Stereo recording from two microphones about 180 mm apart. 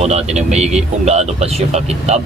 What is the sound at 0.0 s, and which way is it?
A man's voice, 40° right (ahead or behind).